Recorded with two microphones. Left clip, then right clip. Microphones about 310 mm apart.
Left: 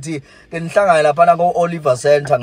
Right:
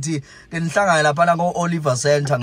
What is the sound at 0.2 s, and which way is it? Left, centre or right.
A man's voice, centre.